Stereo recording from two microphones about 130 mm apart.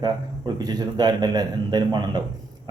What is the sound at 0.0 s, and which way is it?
Speech, 30° right (ahead or behind).